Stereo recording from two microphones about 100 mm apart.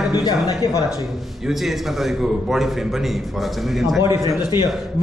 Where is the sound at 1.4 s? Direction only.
5° right (ahead or behind).